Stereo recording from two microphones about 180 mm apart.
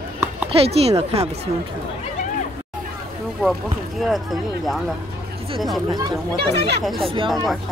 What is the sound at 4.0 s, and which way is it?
Speech, centre (ahead or behind).